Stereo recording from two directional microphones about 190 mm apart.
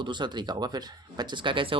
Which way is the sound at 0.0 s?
25° right (ahead or behind).